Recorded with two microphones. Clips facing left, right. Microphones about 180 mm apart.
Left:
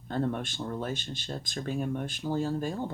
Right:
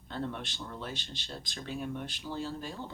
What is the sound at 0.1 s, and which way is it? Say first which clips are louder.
Speech: left 7 dB; 50° left (ahead or behind).